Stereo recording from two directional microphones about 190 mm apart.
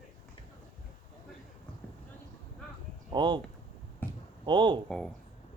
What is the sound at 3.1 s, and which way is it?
Speech, 25° right (ahead or behind).